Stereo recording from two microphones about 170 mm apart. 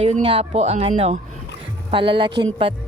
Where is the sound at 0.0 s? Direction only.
35° right (ahead or behind).